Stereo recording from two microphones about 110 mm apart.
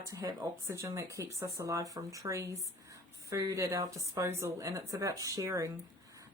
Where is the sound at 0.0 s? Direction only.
30° right (ahead or behind).